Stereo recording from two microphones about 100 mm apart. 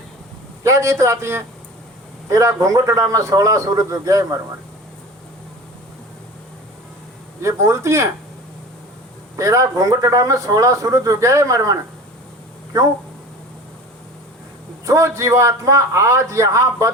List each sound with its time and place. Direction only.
0.6 s a man's voice: 30° right (ahead or behind)
7.4 s a man's voice: 30° right (ahead or behind)
9.3 s a man's voice: 30° right (ahead or behind)
14.8 s a man's voice: 30° right (ahead or behind)